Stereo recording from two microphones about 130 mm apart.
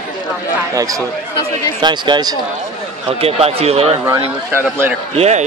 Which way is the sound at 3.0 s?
50° right (ahead or behind).